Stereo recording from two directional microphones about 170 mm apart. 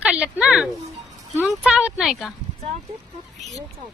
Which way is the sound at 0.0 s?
10° right (ahead or behind).